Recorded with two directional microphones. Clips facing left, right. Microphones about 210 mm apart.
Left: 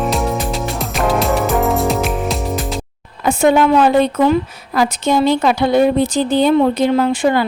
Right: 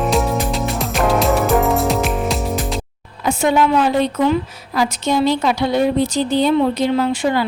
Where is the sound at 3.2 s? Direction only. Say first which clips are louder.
Left 3 dB; 55° left (ahead or behind).